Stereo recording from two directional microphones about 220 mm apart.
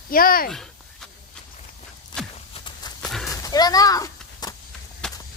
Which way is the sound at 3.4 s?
15° left (ahead or behind).